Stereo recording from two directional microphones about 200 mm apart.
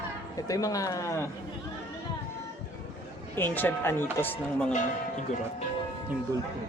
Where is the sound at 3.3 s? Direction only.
10° left (ahead or behind).